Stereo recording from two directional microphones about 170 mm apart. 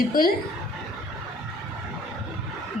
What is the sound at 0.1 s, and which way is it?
Speech, 55° left (ahead or behind).